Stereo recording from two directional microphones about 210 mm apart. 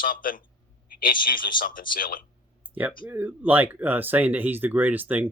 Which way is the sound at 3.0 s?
10° right (ahead or behind).